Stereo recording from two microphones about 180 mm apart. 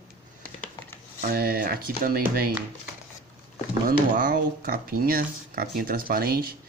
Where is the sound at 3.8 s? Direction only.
50° right (ahead or behind).